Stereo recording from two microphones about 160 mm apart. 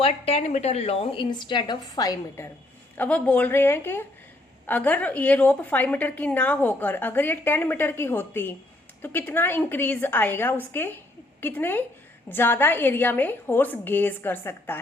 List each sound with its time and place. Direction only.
0.0 s a woman's voice: 40° left (ahead or behind); by 2.5 s 20° left (ahead or behind)
3.0 s a woman's voice: 10° left (ahead or behind)